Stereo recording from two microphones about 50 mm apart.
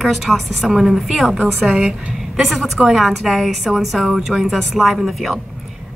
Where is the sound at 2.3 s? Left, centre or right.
Centre.